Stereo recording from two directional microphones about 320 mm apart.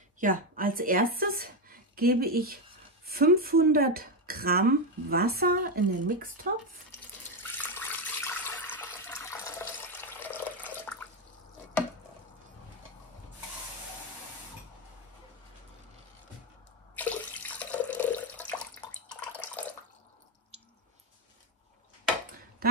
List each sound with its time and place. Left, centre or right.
0.2 s a woman's voice: right
7.5 s water: centre
16.9 s water: centre
22.6 s a sound: right